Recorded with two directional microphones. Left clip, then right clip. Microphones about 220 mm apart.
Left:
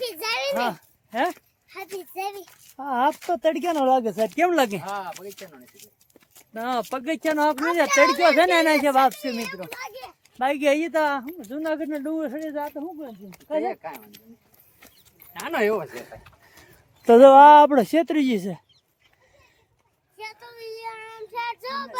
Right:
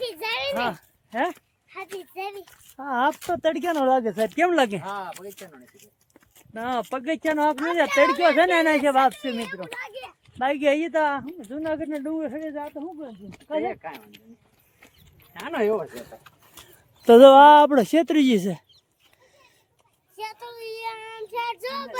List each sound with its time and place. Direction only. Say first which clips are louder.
0.0 s a sound: left 1 dB; 30° left (ahead or behind)
0.7 s speech: left 1 dB; centre (ahead or behind)
1.7 s a child's voice: left 1 dB; 20° left (ahead or behind)
2.7 s speech: left 1 dB; 5° left (ahead or behind)
4.8 s speech: left 1 dB; 25° right (ahead or behind)
5.6 s speech: left 2 dB; 30° left (ahead or behind)
6.5 s speech: left 1 dB; 5° left (ahead or behind)
15.5 s a child's voice: left 1 dB; 30° left (ahead or behind)
17.0 s speech: even; 10° right (ahead or behind)
20.1 s child singing: right 3 dB; 30° right (ahead or behind)